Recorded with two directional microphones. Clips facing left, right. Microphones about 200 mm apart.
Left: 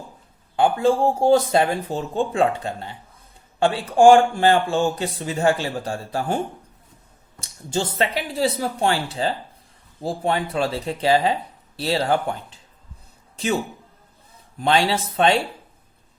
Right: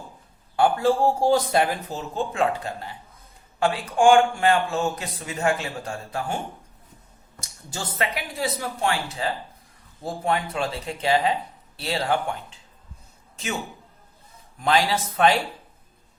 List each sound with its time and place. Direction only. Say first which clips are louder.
0.5 s speech: left 2 dB; 20° left (ahead or behind)
7.4 s speech: left 10 dB; 30° left (ahead or behind)
14.6 s speech: left 2 dB; 30° left (ahead or behind)